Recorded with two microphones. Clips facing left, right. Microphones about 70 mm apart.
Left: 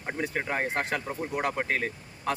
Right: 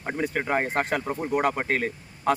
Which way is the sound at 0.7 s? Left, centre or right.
Right.